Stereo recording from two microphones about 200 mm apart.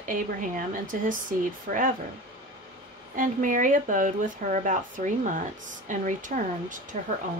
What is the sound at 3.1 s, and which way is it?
Speech, 40° right (ahead or behind).